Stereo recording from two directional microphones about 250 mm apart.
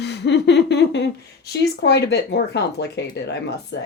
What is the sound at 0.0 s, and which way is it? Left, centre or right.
Speech, left.